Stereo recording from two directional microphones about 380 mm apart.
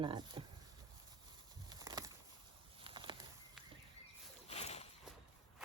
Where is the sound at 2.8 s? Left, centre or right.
Centre.